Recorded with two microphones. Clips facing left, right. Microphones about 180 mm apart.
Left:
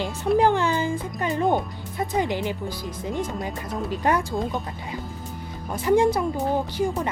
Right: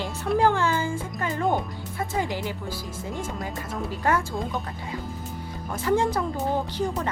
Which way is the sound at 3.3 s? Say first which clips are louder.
Left 2 dB; centre (ahead or behind).